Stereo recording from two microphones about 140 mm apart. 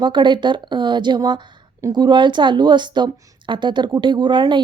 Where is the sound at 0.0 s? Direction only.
35° right (ahead or behind).